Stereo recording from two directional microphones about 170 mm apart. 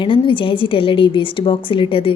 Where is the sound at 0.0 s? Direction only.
30° left (ahead or behind).